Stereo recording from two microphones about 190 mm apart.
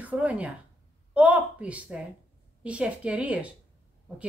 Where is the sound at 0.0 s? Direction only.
5° right (ahead or behind).